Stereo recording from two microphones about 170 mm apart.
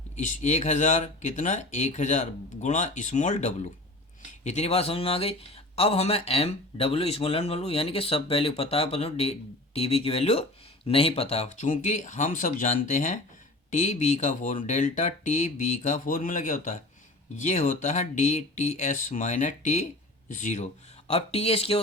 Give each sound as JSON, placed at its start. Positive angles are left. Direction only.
{"t": 0.2, "sound": "speech", "side_deg": 45}